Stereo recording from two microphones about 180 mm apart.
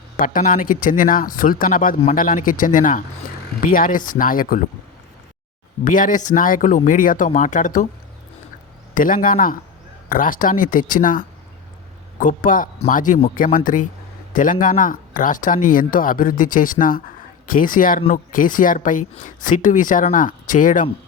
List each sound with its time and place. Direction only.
0.2 s speech: 50° left (ahead or behind)
5.8 s speech: 45° left (ahead or behind)
9.0 s speech: 50° left (ahead or behind)